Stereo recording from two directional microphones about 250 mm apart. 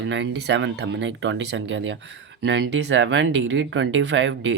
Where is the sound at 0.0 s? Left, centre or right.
Right.